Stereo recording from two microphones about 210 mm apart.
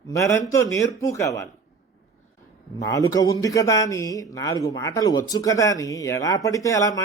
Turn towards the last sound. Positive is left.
turn(degrees=15)  # may be behind; listen again after turning